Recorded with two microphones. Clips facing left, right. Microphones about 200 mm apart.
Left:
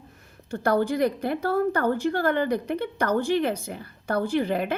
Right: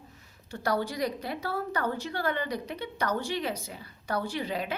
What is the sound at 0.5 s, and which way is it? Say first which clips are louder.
A woman's voice: left 7 dB; 50° left (ahead or behind).